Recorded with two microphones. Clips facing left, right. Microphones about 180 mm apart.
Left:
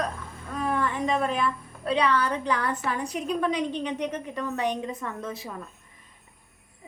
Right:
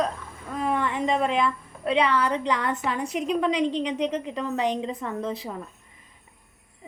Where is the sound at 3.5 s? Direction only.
75° right (ahead or behind).